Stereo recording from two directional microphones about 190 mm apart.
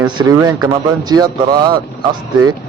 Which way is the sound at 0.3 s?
20° right (ahead or behind).